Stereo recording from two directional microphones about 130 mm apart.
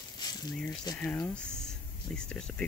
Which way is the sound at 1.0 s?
15° left (ahead or behind).